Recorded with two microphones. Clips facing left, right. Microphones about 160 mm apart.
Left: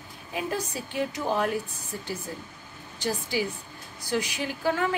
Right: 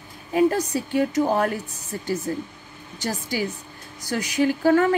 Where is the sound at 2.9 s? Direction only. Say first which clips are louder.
Right 2 dB; 40° right (ahead or behind).